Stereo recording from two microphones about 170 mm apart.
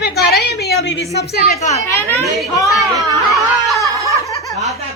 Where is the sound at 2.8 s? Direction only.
20° right (ahead or behind).